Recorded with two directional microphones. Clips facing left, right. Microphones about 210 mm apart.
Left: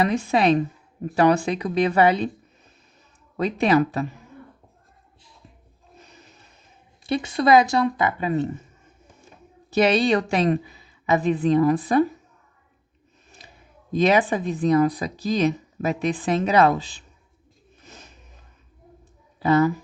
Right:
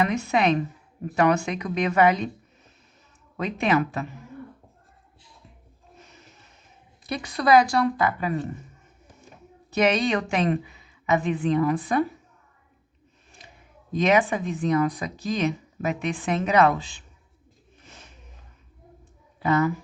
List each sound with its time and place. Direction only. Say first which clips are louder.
0.0 s speech: left 2 dB; 30° left (ahead or behind)
3.3 s speech: left 4 dB; 35° left (ahead or behind)
7.0 s a woman's voice: left 5 dB; 25° left (ahead or behind)
9.6 s speech: left 3 dB; 30° left (ahead or behind)
13.9 s speech: left 2 dB; 35° left (ahead or behind)
19.4 s speech: left 4 dB; 35° left (ahead or behind)